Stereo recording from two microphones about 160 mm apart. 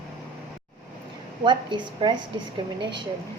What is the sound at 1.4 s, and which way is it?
Speech, 30° right (ahead or behind).